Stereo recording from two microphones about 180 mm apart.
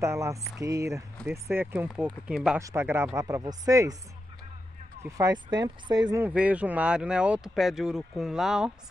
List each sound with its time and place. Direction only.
0.0 s speech: 15° right (ahead or behind)
5.0 s speech: 20° right (ahead or behind)
6.2 s speech: 5° right (ahead or behind)